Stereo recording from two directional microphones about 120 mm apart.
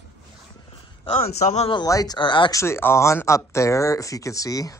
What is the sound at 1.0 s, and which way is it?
Speech, 55° left (ahead or behind).